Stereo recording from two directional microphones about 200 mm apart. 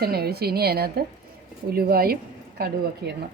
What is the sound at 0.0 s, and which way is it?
A woman's voice, 50° right (ahead or behind).